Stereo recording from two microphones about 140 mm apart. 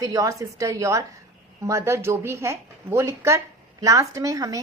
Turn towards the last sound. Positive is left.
turn(degrees=-25)  # may be behind; listen again after turning